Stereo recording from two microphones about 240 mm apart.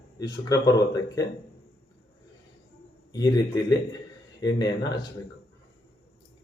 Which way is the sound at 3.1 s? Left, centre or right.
Centre.